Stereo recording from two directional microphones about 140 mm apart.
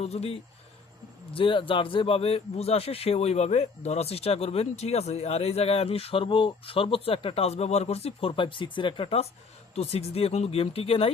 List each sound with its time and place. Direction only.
0.0 s speech: 45° left (ahead or behind)